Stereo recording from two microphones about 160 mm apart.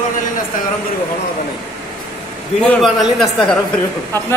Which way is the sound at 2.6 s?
Centre (ahead or behind).